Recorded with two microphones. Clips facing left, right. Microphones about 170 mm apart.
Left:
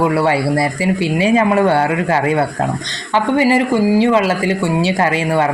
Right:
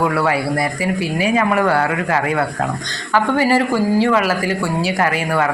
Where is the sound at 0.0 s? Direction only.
25° left (ahead or behind).